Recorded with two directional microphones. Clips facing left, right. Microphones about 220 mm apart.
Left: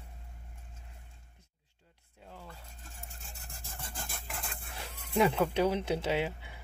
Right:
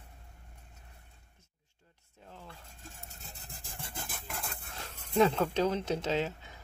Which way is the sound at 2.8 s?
40° right (ahead or behind).